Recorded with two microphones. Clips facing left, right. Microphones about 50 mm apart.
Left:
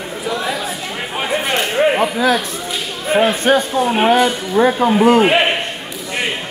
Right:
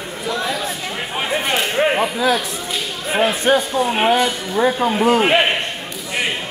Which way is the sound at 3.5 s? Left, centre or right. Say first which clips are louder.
Left 1 dB; left.